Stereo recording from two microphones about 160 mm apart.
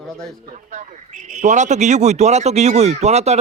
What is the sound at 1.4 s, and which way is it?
Speech, 50° right (ahead or behind).